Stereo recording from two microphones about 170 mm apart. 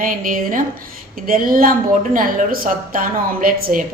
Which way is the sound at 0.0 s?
55° right (ahead or behind).